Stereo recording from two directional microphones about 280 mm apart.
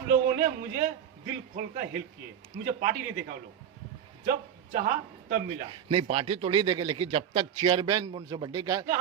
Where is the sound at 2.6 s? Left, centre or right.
Right.